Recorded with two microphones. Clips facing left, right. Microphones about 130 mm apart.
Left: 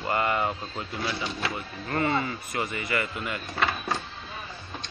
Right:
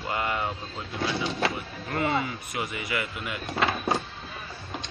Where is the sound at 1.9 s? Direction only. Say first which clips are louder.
Left 1 dB; 5° right (ahead or behind).